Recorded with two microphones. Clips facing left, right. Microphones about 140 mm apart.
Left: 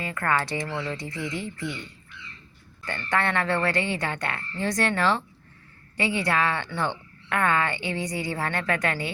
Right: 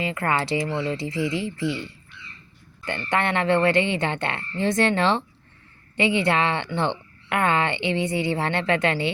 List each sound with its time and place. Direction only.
0.0 s speech: 20° right (ahead or behind)
2.8 s speech: 20° right (ahead or behind)